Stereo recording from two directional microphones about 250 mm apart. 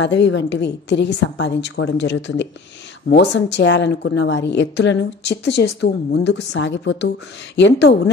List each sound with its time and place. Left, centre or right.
0.0 s a woman's voice: left